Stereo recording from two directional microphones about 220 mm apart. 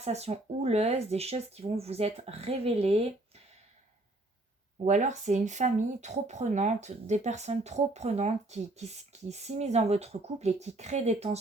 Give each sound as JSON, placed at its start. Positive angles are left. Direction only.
{"t": 0.0, "sound": "speech", "side_deg": -30}
{"t": 4.8, "sound": "speech", "side_deg": -35}